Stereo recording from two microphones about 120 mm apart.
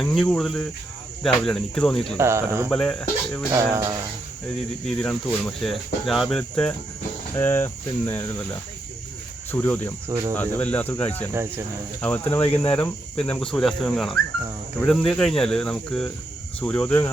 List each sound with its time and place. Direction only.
0.0 s cricket: 5° left (ahead or behind)
2.1 s cricket: 20° right (ahead or behind)
2.6 s speech: 5° left (ahead or behind)
3.5 s cricket: 25° right (ahead or behind)
4.9 s cricket: 10° left (ahead or behind)
7.3 s cricket: 20° left (ahead or behind)
9.5 s cricket: 15° left (ahead or behind)
10.1 s cricket: 25° right (ahead or behind)
10.3 s speech: 15° left (ahead or behind)
12.6 s cricket: 10° left (ahead or behind)
16.6 s speech: 10° left (ahead or behind)